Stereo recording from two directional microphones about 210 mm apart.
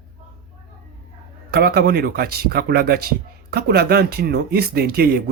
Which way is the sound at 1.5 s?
50° right (ahead or behind).